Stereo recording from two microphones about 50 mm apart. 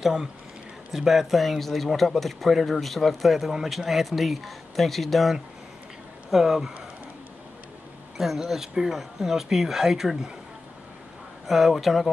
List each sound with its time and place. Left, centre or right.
0.0 s speech: centre
8.2 s speech: centre
11.4 s speech: centre